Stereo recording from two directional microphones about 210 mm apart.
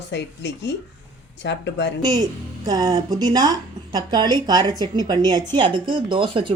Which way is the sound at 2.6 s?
20° right (ahead or behind).